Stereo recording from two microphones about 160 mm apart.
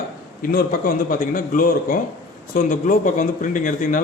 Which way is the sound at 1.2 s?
60° left (ahead or behind).